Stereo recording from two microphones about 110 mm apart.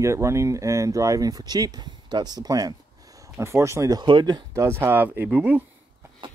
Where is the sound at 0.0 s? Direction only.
25° right (ahead or behind).